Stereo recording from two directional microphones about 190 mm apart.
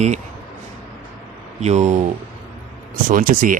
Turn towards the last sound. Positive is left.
turn(degrees=-45)  # may be behind; listen again after turning